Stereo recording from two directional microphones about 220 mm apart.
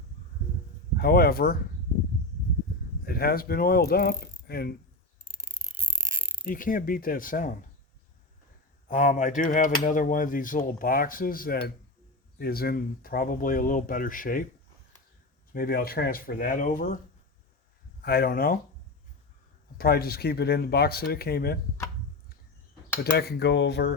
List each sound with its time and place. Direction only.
0.9 s speech: 45° left (ahead or behind)
3.0 s speech: 45° left (ahead or behind)
6.5 s speech: 40° left (ahead or behind)
8.9 s speech: 35° left (ahead or behind)
15.5 s speech: 40° left (ahead or behind)
18.0 s speech: 45° left (ahead or behind)
19.8 s speech: 45° left (ahead or behind)
23.1 s speech: 45° left (ahead or behind)